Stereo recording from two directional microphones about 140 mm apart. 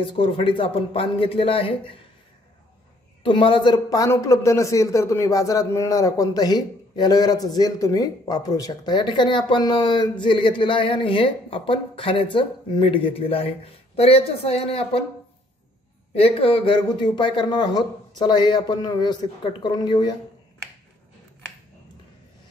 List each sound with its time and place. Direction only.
0.0 s a man's voice: 40° left (ahead or behind)
3.3 s a man's voice: 35° left (ahead or behind)
16.2 s a man's voice: 45° left (ahead or behind)